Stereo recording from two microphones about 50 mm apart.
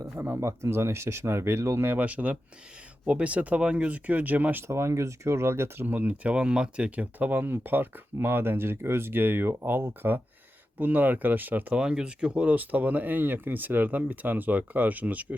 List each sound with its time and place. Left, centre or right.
0.2 s speech: right
2.0 s speech: right
4.6 s speech: right
5.8 s speech: right
10.8 s speech: right
11.8 s speech: centre